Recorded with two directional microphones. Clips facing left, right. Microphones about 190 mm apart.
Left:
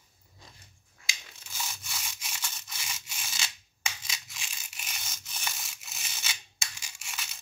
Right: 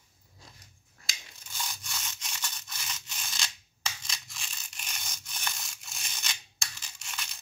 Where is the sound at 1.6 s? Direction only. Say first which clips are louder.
Even; 5° left (ahead or behind).